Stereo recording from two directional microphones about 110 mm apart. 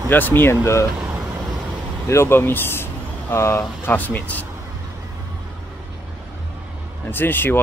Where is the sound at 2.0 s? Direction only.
25° left (ahead or behind).